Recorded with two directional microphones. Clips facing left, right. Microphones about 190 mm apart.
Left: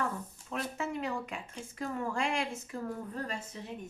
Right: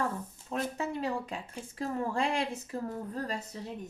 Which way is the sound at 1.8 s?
35° right (ahead or behind).